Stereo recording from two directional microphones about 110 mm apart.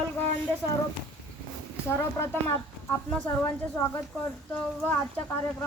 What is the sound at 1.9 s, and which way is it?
Speech, 25° left (ahead or behind).